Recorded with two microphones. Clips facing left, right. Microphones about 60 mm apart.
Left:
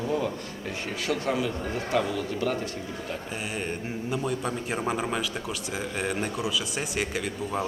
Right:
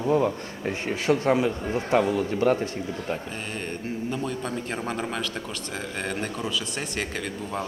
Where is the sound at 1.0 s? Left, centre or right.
Right.